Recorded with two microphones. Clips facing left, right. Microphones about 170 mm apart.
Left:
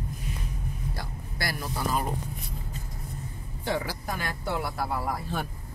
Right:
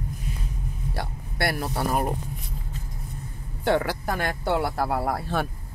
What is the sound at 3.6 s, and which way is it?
Speech, 70° right (ahead or behind).